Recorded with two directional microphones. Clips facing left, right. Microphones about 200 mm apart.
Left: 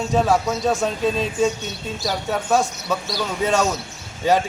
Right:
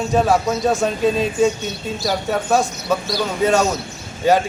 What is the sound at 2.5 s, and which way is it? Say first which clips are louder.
Speech: right 2 dB; 5° right (ahead or behind).